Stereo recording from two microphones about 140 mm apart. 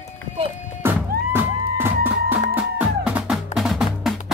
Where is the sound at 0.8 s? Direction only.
15° right (ahead or behind).